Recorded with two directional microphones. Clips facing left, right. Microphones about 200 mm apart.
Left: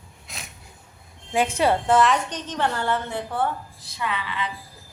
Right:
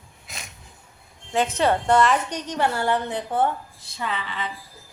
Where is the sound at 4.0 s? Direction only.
35° right (ahead or behind).